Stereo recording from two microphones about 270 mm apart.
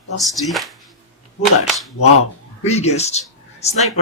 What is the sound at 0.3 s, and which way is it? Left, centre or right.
Speech, centre.